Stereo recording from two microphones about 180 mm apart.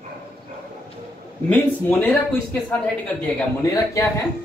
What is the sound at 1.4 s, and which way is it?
A man's voice, 10° left (ahead or behind).